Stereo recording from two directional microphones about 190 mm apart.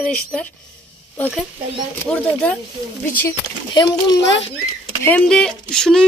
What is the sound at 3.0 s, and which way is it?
Speech, 15° left (ahead or behind).